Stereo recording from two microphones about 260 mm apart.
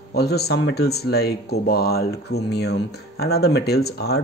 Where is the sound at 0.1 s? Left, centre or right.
Left.